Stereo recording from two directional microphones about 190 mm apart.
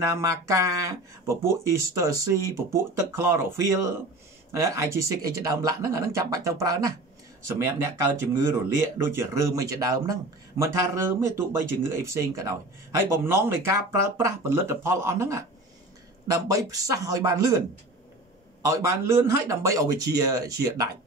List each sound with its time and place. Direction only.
0.0 s speech: 15° right (ahead or behind)
18.7 s speech: 15° right (ahead or behind)